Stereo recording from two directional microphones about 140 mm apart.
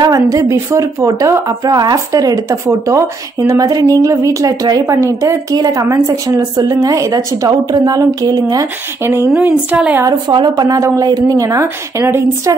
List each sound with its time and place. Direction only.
0.0 s a woman's voice: 25° right (ahead or behind)
10.0 s a woman's voice: 30° right (ahead or behind)